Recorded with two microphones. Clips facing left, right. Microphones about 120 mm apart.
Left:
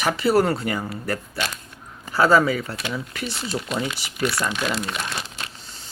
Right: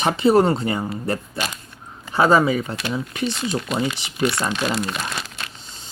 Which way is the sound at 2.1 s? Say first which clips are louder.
Right 1 dB; 20° right (ahead or behind).